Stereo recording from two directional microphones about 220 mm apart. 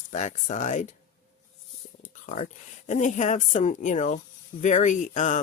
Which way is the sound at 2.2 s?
35° left (ahead or behind).